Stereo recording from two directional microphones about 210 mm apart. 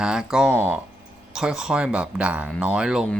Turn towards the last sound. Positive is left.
turn(degrees=-5)  # may be behind; listen again after turning